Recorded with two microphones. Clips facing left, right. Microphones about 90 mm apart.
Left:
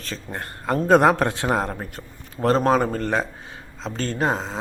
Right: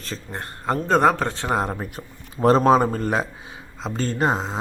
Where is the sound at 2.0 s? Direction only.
25° right (ahead or behind).